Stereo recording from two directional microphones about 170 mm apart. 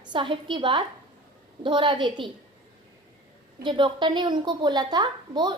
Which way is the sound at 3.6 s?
25° right (ahead or behind).